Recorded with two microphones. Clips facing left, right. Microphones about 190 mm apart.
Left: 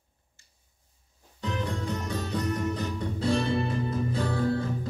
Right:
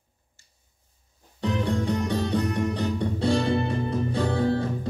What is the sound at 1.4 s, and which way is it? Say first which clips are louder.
Music: right 6 dB; 30° right (ahead or behind).